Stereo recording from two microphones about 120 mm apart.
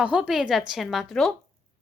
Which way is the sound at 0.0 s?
5° right (ahead or behind).